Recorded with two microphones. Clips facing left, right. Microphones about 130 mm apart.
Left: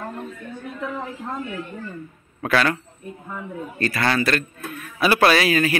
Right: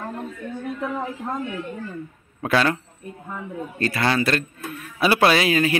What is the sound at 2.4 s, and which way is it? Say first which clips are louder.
Speech: even; 25° right (ahead or behind).